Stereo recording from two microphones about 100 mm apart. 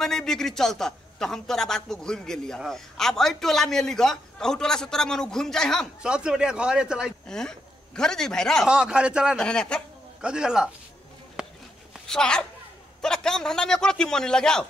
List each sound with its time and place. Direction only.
0.0 s a man's voice: 5° left (ahead or behind)
6.0 s speech: 10° right (ahead or behind)
7.2 s speech: 5° left (ahead or behind)
8.6 s speech: 10° right (ahead or behind)
9.4 s a man's voice: 10° left (ahead or behind)
10.2 s speech: 5° right (ahead or behind)
11.4 s a sound: 10° right (ahead or behind)
11.9 s a man's voice: 5° left (ahead or behind)